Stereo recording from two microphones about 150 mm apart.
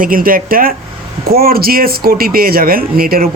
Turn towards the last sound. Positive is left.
turn(degrees=-80)